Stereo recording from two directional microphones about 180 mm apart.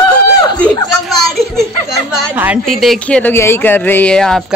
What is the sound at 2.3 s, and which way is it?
Speech, 10° right (ahead or behind).